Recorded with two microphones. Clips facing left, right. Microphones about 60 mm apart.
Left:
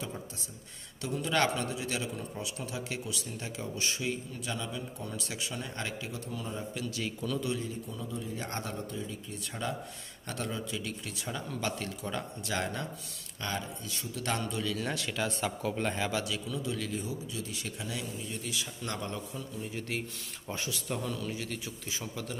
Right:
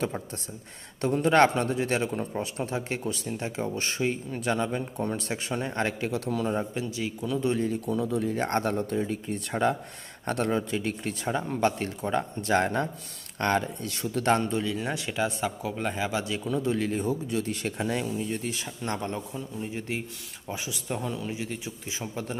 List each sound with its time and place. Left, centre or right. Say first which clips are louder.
1.0 s a man's voice: right 9 dB; right
6.5 s a man's voice: right 8 dB; right
7.0 s speech: right 3 dB; centre
7.4 s a man's voice: right 8 dB; right
7.7 s a man's voice: right 11 dB; right
13.4 s speech: right 10 dB; right
14.2 s a man's voice: right 9 dB; right
14.6 s speech: right 3 dB; right
16.2 s a man's voice: right 6 dB; right
20.4 s speech: right 3 dB; centre